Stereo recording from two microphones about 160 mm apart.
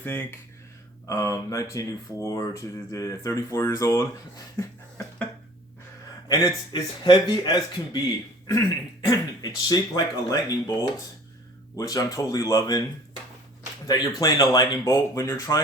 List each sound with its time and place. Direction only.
0.0 s speech: 15° left (ahead or behind)
6.2 s speech: 25° left (ahead or behind)
11.8 s speech: 20° left (ahead or behind)
13.8 s speech: 25° left (ahead or behind)